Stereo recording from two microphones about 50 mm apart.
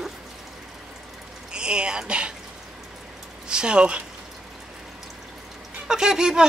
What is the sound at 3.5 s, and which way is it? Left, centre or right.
Speech, centre.